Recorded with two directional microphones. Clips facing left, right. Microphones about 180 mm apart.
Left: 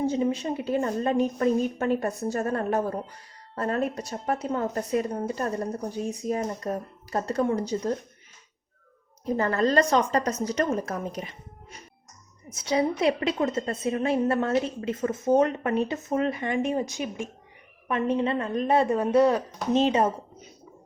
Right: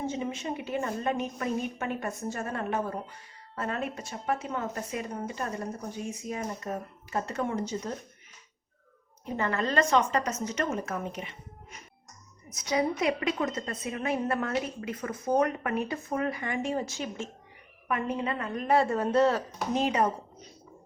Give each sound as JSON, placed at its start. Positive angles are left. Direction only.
{"t": 0.0, "sound": "a woman's voice", "side_deg": 35}
{"t": 9.2, "sound": "a woman's voice", "side_deg": 35}
{"t": 17.8, "sound": "a woman's voice", "side_deg": 25}
{"t": 19.7, "sound": "a woman's voice", "side_deg": 25}